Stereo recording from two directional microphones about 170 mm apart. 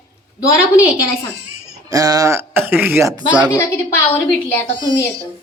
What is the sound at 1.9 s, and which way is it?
Speech, 20° right (ahead or behind).